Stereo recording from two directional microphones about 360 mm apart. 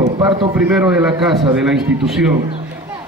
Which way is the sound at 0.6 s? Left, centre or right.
Centre.